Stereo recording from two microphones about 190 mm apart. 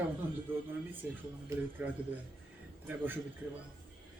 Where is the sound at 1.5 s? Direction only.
15° right (ahead or behind).